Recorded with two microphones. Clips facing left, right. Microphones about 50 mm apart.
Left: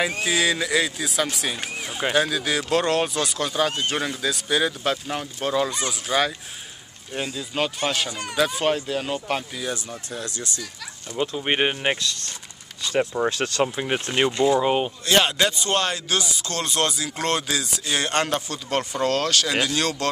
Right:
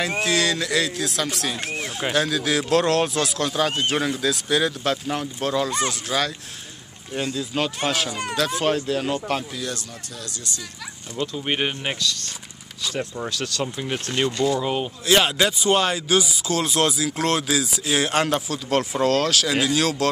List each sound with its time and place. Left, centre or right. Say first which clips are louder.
0.2 s speech: even; centre
8.1 s speech: right 4 dB; right
8.5 s speech: right 1 dB; centre
10.1 s speech: left 4 dB; left
11.1 s speech: left 2 dB; centre
15.0 s speech: right 2 dB; centre